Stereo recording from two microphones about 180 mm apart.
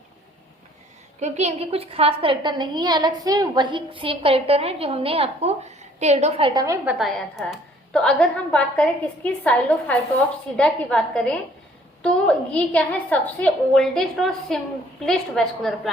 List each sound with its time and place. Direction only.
1.2 s a woman's voice: 40° right (ahead or behind)
6.5 s a woman's voice: 20° right (ahead or behind)
6.8 s a woman's voice: centre (ahead or behind)